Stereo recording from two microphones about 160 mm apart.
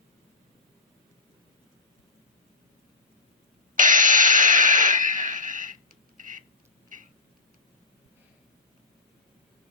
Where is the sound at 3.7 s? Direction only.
55° right (ahead or behind).